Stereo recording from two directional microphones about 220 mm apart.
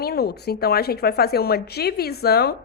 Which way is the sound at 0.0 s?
45° left (ahead or behind).